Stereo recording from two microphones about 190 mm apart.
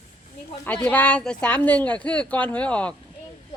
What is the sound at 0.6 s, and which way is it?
Speech, 10° left (ahead or behind).